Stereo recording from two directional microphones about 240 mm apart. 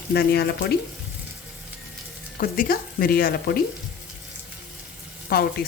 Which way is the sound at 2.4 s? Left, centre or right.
Left.